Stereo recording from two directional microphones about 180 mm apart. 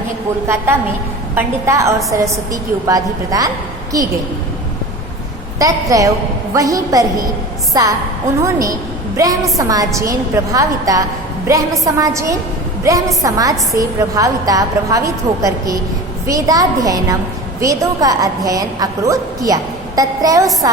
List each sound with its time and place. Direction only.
1.4 s a woman's voice: 15° right (ahead or behind)
5.5 s a woman's voice: 20° right (ahead or behind)